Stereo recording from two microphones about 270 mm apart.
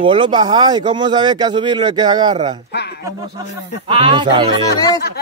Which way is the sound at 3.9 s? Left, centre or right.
Centre.